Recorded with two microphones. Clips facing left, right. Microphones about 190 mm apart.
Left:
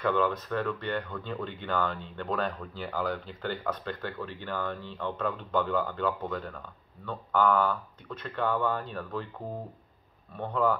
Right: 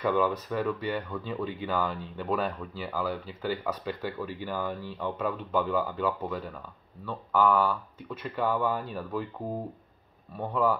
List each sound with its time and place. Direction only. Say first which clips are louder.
0.0 s speech: right 1 dB; 10° right (ahead or behind)
10.3 s speech: right 1 dB; 5° right (ahead or behind)